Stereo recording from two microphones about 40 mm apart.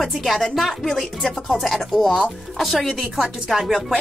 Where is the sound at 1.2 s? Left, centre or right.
Centre.